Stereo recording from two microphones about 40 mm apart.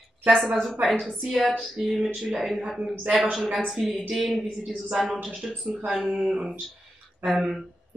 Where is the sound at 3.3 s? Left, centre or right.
Centre.